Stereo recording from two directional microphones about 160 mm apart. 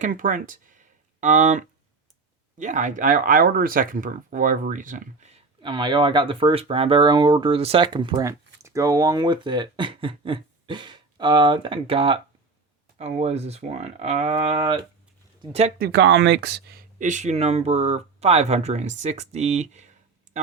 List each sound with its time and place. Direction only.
0.0 s speech: 55° right (ahead or behind)
5.6 s speech: 30° right (ahead or behind)
15.8 s speech: 90° right
17.0 s speech: 50° right (ahead or behind)